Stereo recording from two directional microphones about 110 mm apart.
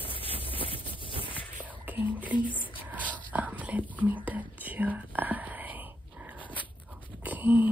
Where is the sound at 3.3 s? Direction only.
15° right (ahead or behind).